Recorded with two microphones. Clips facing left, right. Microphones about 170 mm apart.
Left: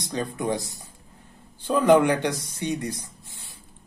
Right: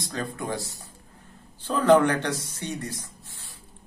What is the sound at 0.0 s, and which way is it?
Speech, 20° left (ahead or behind).